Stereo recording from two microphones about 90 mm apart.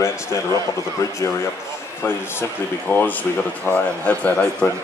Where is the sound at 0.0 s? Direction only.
35° left (ahead or behind).